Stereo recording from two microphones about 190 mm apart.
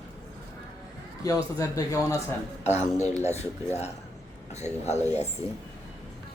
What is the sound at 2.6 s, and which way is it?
Speech, 35° left (ahead or behind).